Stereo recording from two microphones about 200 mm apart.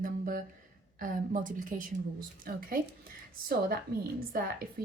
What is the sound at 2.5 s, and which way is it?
Speech, 50° right (ahead or behind).